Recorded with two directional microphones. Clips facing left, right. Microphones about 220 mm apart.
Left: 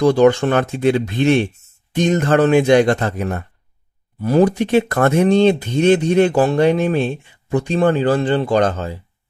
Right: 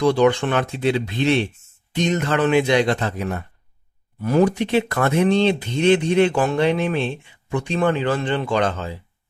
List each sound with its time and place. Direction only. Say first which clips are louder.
0.0 s speech: left 4 dB; 45° left (ahead or behind)
4.2 s speech: left 3 dB; 35° left (ahead or behind)